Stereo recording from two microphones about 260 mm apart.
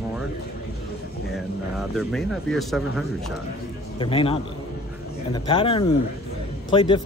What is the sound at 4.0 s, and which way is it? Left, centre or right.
A man's voice, centre.